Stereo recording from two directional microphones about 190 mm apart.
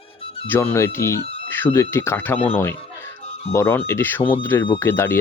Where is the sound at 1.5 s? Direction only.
10° left (ahead or behind).